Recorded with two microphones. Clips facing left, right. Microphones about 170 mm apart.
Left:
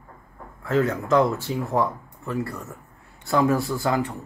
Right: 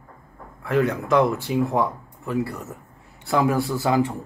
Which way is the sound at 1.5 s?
15° right (ahead or behind).